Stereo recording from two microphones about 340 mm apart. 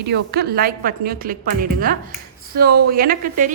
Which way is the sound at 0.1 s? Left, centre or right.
Right.